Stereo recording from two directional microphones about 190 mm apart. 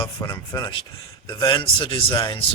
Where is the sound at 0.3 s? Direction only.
20° left (ahead or behind).